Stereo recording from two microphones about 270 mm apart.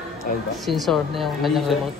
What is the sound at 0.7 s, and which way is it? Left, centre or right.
Speech, centre.